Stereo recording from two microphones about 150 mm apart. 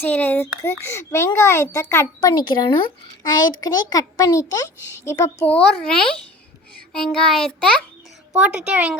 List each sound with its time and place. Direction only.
0.0 s a child's voice: 10° left (ahead or behind)
5.5 s a child's voice: 5° left (ahead or behind)
8.4 s speech: 5° right (ahead or behind)